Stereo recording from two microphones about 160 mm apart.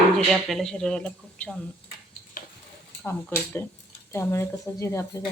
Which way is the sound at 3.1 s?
15° left (ahead or behind).